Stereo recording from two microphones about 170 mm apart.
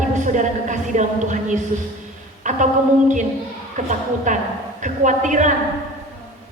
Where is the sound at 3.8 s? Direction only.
45° right (ahead or behind).